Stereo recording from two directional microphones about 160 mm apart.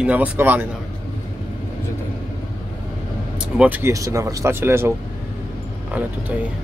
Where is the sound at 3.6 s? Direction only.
15° right (ahead or behind).